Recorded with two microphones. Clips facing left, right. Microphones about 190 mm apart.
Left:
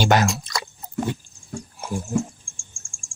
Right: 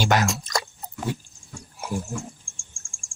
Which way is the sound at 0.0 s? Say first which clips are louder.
Left 3 dB; 30° left (ahead or behind).